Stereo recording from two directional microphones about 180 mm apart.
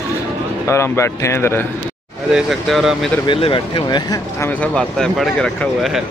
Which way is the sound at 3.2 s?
30° left (ahead or behind).